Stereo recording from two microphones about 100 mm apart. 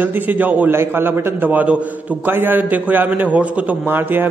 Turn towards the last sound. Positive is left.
turn(degrees=-20)  # may be behind; listen again after turning